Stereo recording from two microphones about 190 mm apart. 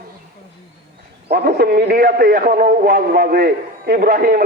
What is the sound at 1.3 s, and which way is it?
A man's voice, 55° right (ahead or behind).